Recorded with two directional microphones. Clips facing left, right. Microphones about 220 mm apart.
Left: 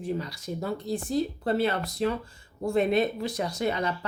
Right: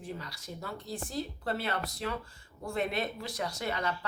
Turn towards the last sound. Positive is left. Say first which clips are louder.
# left 6 dB
turn(degrees=25)  # may be behind; listen again after turning